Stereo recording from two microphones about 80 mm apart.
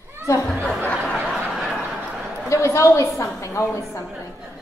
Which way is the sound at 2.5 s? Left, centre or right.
Left.